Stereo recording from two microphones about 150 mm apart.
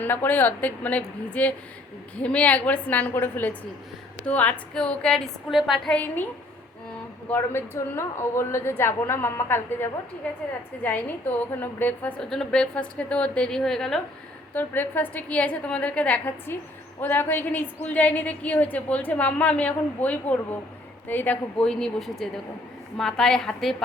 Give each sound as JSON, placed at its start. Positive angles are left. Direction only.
{"t": 0.0, "sound": "a woman's voice", "side_deg": 10}
{"t": 7.3, "sound": "a woman's voice", "side_deg": 15}
{"t": 14.5, "sound": "a woman's voice", "side_deg": 10}